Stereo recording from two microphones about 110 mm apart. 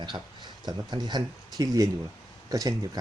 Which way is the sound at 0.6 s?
40° right (ahead or behind).